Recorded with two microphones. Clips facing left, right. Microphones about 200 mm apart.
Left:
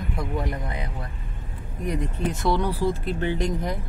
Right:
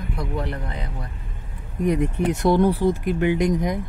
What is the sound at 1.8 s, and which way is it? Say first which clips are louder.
Speech: right 6 dB; 20° right (ahead or behind).